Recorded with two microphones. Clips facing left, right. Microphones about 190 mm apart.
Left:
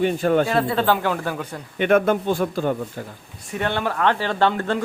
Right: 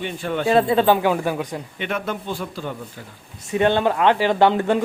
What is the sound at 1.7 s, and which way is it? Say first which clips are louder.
Speech: left 10 dB; 50° left (ahead or behind).